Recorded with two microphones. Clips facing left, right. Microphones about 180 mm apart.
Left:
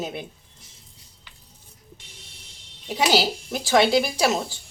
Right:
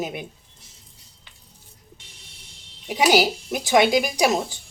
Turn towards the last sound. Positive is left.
turn(degrees=-15)  # may be behind; listen again after turning